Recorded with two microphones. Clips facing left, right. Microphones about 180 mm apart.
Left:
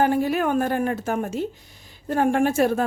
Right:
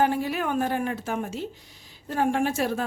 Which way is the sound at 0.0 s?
45° left (ahead or behind).